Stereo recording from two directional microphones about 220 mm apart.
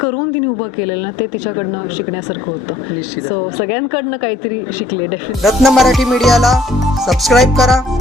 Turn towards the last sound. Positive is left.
turn(degrees=0)  # may be behind; listen again after turning